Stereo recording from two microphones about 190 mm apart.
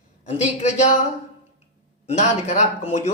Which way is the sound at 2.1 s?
35° left (ahead or behind).